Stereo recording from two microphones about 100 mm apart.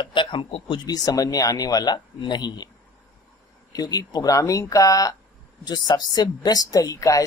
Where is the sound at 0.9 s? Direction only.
40° left (ahead or behind).